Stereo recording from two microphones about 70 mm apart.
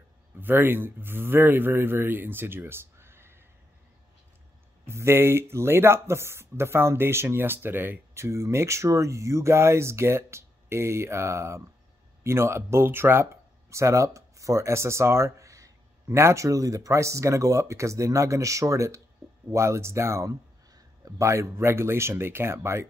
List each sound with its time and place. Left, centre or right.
0.4 s speech: right
4.8 s speech: right
8.1 s speech: right